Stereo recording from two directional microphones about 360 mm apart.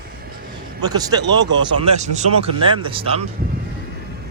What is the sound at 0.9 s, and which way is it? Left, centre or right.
Speech, centre.